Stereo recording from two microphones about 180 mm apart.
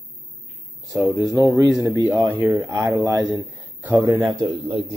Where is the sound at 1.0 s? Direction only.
Centre (ahead or behind).